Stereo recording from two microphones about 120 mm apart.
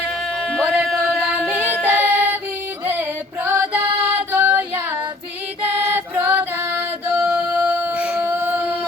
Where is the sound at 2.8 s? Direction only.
15° right (ahead or behind).